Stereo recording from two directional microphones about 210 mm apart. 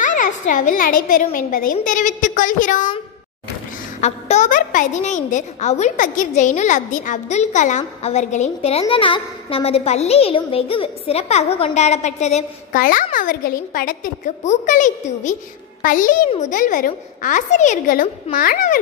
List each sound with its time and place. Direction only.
0.0 s a woman's voice: 40° left (ahead or behind)
4.0 s a woman's voice: 35° left (ahead or behind)